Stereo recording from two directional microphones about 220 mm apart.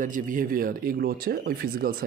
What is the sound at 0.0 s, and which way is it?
Speech, 35° right (ahead or behind).